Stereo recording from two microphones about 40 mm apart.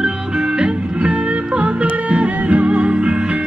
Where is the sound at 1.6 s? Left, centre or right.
Right.